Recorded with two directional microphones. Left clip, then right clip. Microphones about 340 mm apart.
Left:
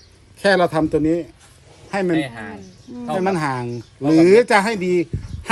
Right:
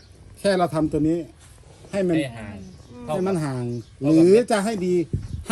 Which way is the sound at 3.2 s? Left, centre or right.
Left.